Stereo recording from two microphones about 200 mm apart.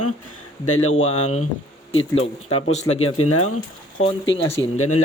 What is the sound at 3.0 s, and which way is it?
Speech, 90° left.